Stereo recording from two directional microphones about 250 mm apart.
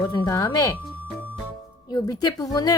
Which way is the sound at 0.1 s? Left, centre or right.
Centre.